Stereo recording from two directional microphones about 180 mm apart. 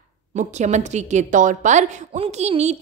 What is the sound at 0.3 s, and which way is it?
A woman's voice, 40° right (ahead or behind).